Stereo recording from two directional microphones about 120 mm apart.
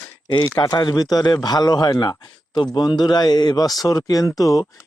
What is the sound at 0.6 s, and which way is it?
A man's voice, 35° left (ahead or behind).